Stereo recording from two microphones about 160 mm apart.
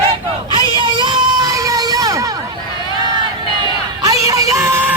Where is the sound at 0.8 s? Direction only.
30° right (ahead or behind).